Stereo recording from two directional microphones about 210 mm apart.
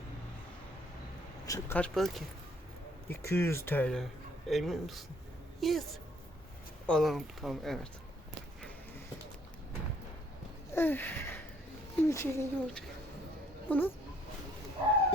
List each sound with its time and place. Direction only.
1.5 s speech: 15° left (ahead or behind)
1.8 s speech: centre (ahead or behind)
3.1 s a woman's voice: 10° left (ahead or behind)
6.8 s speech: centre (ahead or behind)
10.8 s a sound: 10° left (ahead or behind)
12.0 s speech: 15° left (ahead or behind)